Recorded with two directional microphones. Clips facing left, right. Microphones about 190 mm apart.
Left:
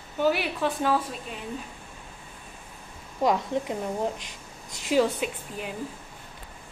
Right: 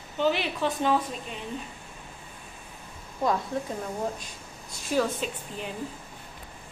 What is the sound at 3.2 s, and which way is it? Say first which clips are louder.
Speech: left 3 dB; 20° left (ahead or behind).